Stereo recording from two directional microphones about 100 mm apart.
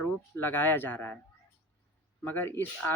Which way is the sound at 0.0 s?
20° left (ahead or behind).